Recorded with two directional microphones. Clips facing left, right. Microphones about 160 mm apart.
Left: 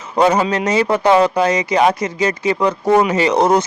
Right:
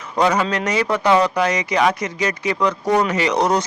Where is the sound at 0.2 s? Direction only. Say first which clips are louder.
Left 4 dB; 25° left (ahead or behind).